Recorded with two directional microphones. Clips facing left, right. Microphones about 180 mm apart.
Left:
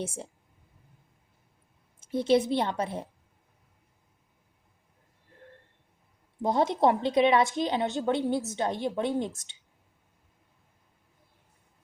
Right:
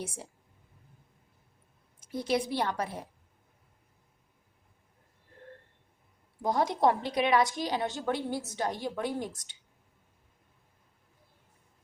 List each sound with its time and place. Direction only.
0.0 s a woman's voice: 25° left (ahead or behind)
2.0 s a woman's voice: 25° left (ahead or behind)
6.4 s a woman's voice: 25° left (ahead or behind)